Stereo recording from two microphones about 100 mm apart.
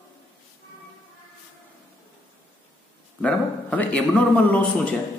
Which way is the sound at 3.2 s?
15° left (ahead or behind).